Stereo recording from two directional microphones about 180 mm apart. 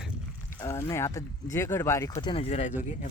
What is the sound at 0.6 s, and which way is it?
Speech, 15° left (ahead or behind).